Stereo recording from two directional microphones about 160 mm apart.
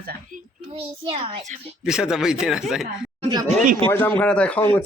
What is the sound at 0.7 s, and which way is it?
Speech, 35° right (ahead or behind).